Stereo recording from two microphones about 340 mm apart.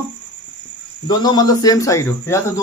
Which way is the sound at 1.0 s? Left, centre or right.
Centre.